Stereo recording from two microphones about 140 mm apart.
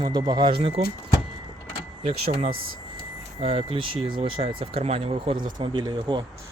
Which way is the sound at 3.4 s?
45° right (ahead or behind).